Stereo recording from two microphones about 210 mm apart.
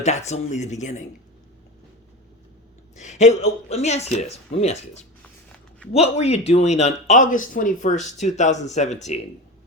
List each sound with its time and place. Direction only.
0.0 s speech: 30° left (ahead or behind)
3.0 s speech: 35° left (ahead or behind)